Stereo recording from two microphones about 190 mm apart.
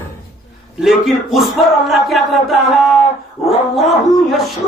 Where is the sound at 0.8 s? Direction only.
Centre (ahead or behind).